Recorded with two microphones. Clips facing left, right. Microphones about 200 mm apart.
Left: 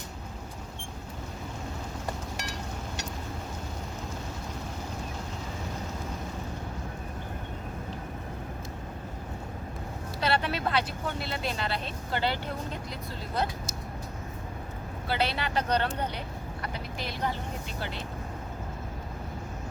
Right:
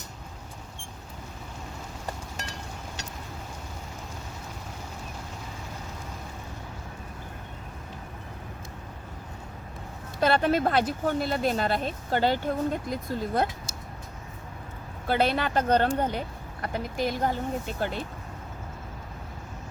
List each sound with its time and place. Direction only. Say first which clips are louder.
10.2 s speech: right 6 dB; 50° right (ahead or behind)
15.0 s speech: right 5 dB; 50° right (ahead or behind)